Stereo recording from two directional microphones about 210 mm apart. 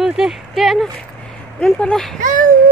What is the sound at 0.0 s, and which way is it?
Speech, centre (ahead or behind).